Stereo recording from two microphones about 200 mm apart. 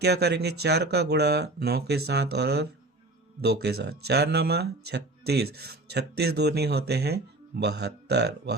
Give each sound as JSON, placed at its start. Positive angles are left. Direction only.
{"t": 0.0, "sound": "speech", "side_deg": -55}